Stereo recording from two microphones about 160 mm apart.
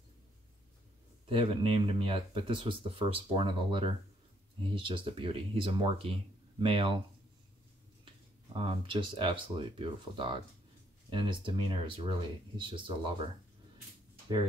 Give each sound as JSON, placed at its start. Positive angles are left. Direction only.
{"t": 1.3, "sound": "speech", "side_deg": -40}
{"t": 8.5, "sound": "speech", "side_deg": -30}